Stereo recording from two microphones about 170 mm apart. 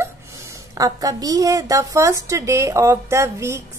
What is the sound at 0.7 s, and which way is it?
A woman's voice, 20° right (ahead or behind).